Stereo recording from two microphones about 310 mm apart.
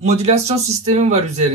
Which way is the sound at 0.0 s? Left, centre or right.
Right.